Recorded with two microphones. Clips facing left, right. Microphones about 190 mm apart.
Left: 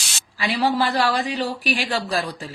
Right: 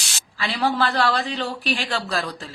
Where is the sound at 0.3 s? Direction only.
15° left (ahead or behind).